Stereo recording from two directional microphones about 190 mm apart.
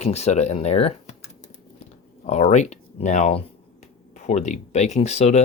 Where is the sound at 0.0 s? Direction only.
35° left (ahead or behind).